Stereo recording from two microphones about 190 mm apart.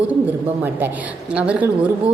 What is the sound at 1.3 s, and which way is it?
Speech, 5° right (ahead or behind).